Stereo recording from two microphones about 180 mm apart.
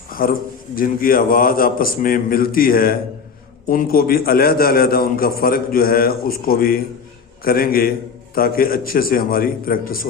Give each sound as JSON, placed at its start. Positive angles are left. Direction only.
{"t": 0.1, "sound": "a man's voice", "side_deg": 55}